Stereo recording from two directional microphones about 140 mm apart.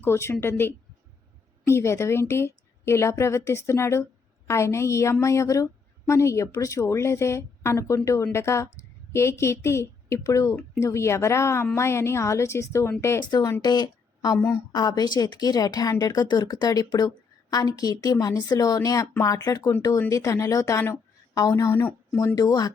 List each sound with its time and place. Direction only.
0.0 s a woman's voice: 20° left (ahead or behind)
13.3 s a woman's voice: 25° left (ahead or behind)
14.3 s a woman's voice: 20° left (ahead or behind)